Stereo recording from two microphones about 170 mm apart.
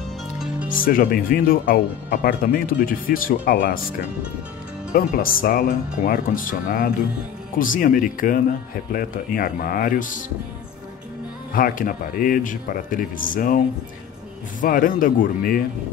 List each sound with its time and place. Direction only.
0.7 s speech: 55° left (ahead or behind)
4.9 s speech: 55° left (ahead or behind)
11.5 s a man's voice: 55° left (ahead or behind)
14.6 s speech: 55° left (ahead or behind)